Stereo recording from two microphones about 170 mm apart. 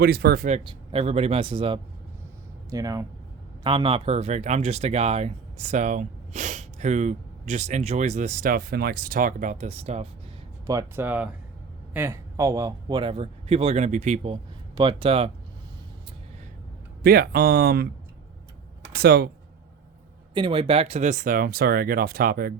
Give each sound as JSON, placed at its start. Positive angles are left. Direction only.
{"t": 0.0, "sound": "speech", "side_deg": -70}
{"t": 0.6, "sound": "speech", "side_deg": -30}
{"t": 10.7, "sound": "speech", "side_deg": -15}
{"t": 14.8, "sound": "speech", "side_deg": -30}
{"t": 17.0, "sound": "speech", "side_deg": -65}
{"t": 18.9, "sound": "speech", "side_deg": -65}
{"t": 20.3, "sound": "speech", "side_deg": -30}